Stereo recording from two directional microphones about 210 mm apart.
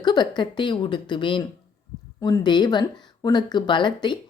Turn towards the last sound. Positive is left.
turn(degrees=20)  # may be behind; listen again after turning